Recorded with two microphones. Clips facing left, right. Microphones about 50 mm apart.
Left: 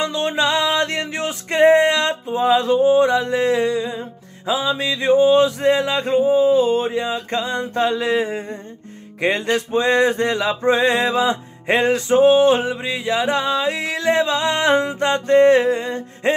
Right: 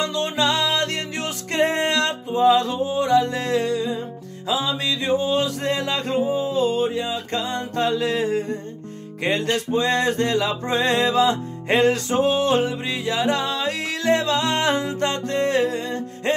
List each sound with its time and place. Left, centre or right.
0.0 s music: left